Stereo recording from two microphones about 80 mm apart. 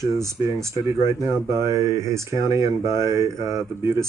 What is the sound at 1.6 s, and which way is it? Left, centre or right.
Speech, right.